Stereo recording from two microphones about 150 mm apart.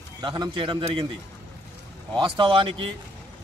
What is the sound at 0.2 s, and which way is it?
Speech, 30° right (ahead or behind).